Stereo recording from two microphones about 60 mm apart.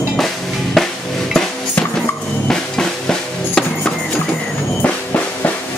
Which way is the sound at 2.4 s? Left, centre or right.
Centre.